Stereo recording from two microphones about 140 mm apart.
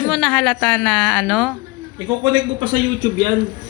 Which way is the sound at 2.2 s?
30° right (ahead or behind).